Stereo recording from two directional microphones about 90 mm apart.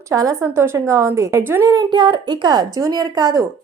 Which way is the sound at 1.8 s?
60° right (ahead or behind).